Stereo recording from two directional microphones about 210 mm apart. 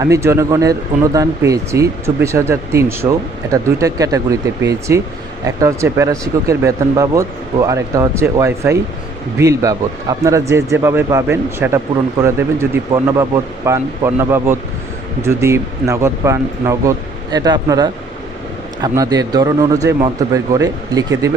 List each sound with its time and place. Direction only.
0.0 s speech: 15° right (ahead or behind)